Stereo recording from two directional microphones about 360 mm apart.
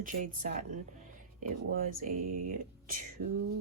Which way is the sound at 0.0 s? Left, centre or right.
Right.